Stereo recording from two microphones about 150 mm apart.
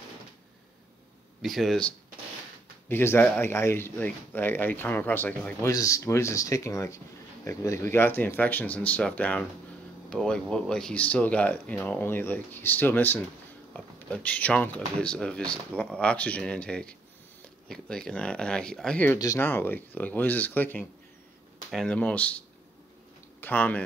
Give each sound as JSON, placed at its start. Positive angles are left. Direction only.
{"t": 1.4, "sound": "speech", "side_deg": 0}
{"t": 2.9, "sound": "speech", "side_deg": 15}
{"t": 19.1, "sound": "speech", "side_deg": 20}
{"t": 23.4, "sound": "speech", "side_deg": 10}